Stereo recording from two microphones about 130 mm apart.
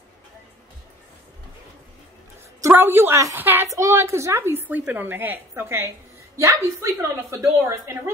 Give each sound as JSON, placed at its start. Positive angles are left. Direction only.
{"t": 2.6, "sound": "a woman's voice", "side_deg": -15}